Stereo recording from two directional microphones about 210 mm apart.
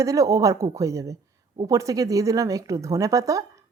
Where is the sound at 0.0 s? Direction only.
15° right (ahead or behind).